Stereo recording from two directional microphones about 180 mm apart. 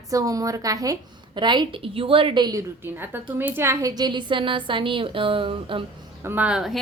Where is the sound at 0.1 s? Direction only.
20° right (ahead or behind).